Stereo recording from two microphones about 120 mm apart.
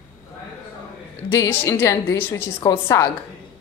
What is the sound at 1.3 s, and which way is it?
Speech, 25° left (ahead or behind).